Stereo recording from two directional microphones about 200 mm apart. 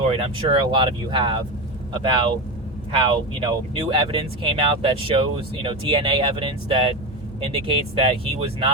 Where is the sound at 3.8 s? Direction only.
25° right (ahead or behind).